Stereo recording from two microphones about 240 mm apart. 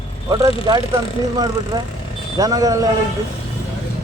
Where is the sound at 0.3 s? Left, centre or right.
Centre.